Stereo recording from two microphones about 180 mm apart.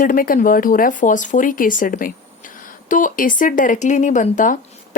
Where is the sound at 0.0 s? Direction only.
50° left (ahead or behind).